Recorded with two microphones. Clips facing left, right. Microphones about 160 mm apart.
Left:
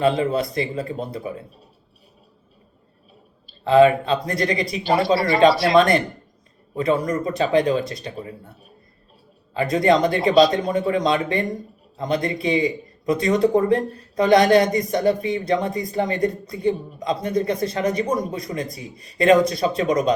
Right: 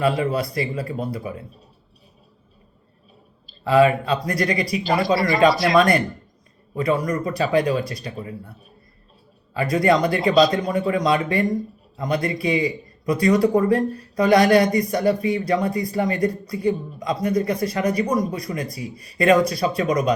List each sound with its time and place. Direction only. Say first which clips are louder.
0.0 s a man's voice: left 1 dB; 25° left (ahead or behind)
3.6 s a man's voice: left 2 dB; 25° left (ahead or behind)
9.6 s a man's voice: left 1 dB; 25° left (ahead or behind)